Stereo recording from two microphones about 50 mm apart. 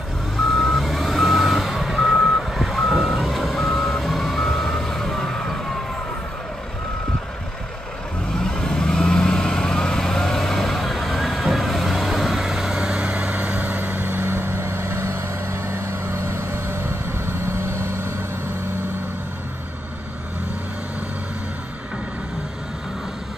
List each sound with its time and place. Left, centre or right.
0.4 s reversing beeps: centre
8.5 s vehicle: centre
13.3 s vehicle: right